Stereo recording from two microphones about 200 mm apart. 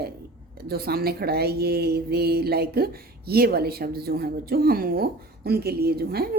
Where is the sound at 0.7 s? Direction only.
50° right (ahead or behind).